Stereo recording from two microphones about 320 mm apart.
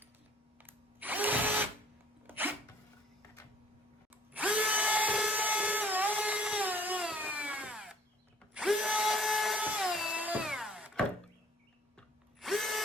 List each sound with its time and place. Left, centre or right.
0.6 s drill: centre
2.2 s a sound: centre
4.4 s drill: centre